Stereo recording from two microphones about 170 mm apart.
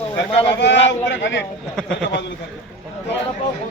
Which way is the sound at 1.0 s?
90° left.